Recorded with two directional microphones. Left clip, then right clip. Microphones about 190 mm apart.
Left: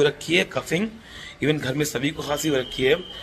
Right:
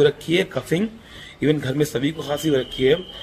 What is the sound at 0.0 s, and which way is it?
A man's voice, 10° right (ahead or behind).